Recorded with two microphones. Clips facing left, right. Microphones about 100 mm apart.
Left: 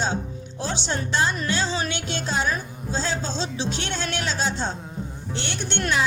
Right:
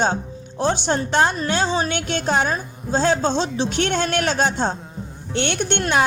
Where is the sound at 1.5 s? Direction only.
55° right (ahead or behind).